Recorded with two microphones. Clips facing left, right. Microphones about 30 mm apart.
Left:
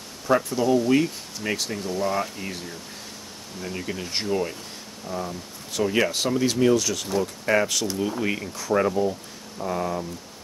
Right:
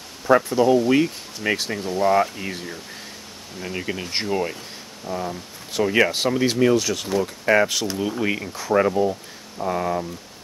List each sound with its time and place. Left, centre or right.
0.3 s speech: right
3.6 s speech: right